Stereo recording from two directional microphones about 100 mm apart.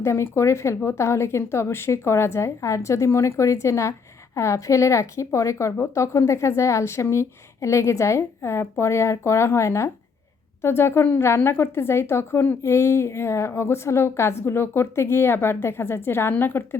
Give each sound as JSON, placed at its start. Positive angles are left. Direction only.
{"t": 0.0, "sound": "a woman's voice", "side_deg": 25}